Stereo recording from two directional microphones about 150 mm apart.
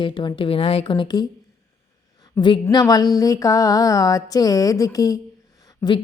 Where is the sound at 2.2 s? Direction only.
30° left (ahead or behind).